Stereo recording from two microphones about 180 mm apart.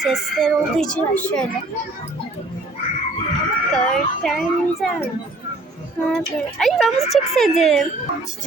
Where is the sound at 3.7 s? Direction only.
5° left (ahead or behind).